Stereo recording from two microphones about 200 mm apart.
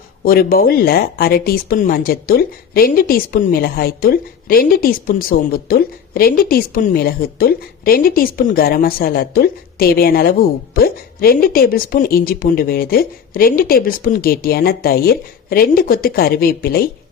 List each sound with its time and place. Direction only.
0.3 s speech: 45° left (ahead or behind)